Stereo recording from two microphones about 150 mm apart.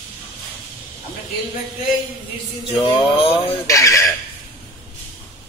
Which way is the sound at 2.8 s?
35° left (ahead or behind).